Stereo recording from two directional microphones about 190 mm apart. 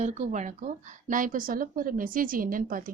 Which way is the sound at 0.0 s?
35° right (ahead or behind).